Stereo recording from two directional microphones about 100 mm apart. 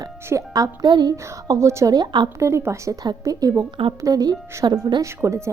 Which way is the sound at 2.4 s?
25° right (ahead or behind).